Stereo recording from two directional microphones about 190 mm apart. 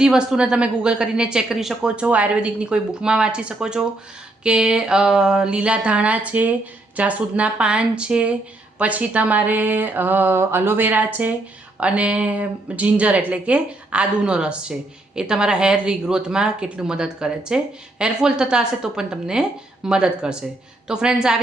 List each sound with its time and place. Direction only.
0.0 s a woman's voice: 5° right (ahead or behind)